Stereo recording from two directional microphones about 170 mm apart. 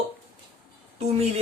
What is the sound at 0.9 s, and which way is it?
Speech, 40° right (ahead or behind).